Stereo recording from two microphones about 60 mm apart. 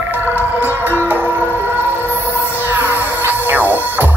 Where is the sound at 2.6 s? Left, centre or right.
Right.